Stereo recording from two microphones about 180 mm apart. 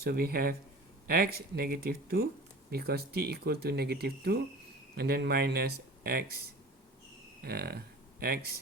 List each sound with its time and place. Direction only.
0.0 s speech: 55° right (ahead or behind)
7.4 s speech: 60° right (ahead or behind)